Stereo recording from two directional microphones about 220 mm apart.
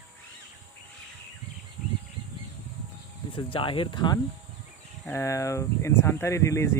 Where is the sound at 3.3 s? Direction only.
25° left (ahead or behind).